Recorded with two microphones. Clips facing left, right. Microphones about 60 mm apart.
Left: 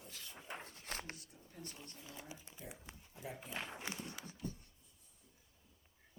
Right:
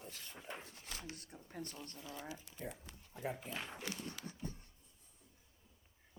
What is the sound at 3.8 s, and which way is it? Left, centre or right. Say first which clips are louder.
Speech: right 1 dB; left.